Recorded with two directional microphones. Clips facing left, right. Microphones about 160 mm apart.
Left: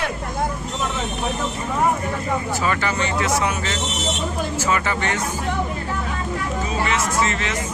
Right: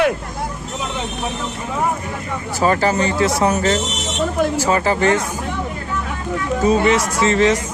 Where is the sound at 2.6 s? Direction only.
35° right (ahead or behind).